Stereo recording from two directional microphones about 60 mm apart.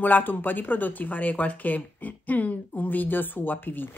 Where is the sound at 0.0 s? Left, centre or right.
Left.